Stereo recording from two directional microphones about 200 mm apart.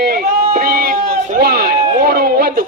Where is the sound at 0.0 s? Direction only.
50° right (ahead or behind).